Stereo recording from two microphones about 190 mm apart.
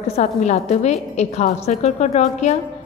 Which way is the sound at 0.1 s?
35° left (ahead or behind).